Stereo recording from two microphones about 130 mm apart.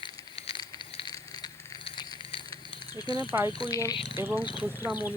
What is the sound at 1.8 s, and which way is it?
Fire, 35° left (ahead or behind).